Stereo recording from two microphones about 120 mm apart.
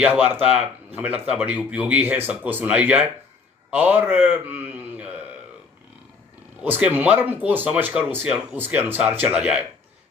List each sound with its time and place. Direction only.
0.0 s a man's voice: 15° right (ahead or behind)
6.6 s speech: 15° right (ahead or behind)